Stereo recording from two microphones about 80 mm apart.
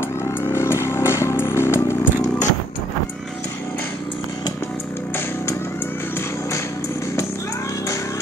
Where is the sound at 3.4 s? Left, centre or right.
Left.